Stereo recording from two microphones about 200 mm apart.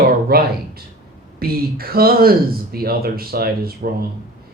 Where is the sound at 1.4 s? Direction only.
50° right (ahead or behind).